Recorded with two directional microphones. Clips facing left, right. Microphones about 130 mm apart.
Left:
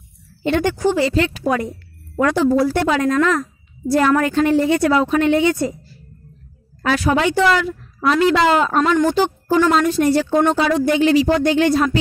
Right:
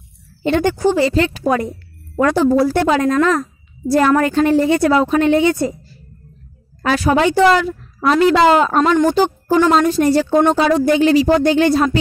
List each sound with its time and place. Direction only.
0.4 s a woman's voice: 30° right (ahead or behind)
6.8 s a woman's voice: 35° right (ahead or behind)